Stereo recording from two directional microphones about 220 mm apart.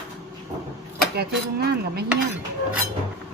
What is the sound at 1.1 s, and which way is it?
Speech, 45° right (ahead or behind).